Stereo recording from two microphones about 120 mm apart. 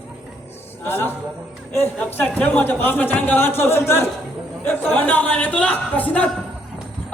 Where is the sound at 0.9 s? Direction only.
20° left (ahead or behind).